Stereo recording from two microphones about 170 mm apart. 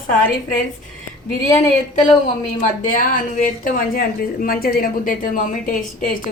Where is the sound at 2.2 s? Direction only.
50° left (ahead or behind).